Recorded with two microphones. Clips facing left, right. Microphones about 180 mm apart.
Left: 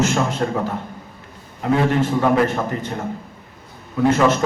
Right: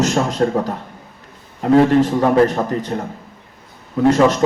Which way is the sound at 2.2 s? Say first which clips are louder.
Right 3 dB; 35° right (ahead or behind).